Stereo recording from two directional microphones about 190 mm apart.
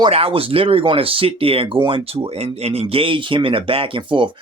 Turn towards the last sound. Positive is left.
turn(degrees=-25)  # may be behind; listen again after turning